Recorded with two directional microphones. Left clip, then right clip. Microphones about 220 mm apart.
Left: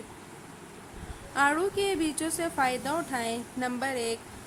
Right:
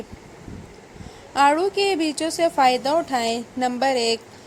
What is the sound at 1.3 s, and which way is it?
A woman's voice, 25° right (ahead or behind).